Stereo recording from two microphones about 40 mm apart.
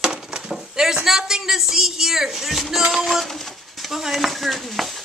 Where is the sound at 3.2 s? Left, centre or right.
Centre.